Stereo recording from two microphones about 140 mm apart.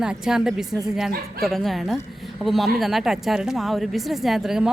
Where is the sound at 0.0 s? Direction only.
5° right (ahead or behind).